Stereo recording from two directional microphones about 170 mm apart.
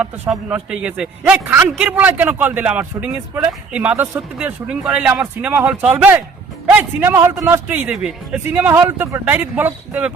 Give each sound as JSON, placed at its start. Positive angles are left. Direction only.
{"t": 0.0, "sound": "a man's voice", "side_deg": -10}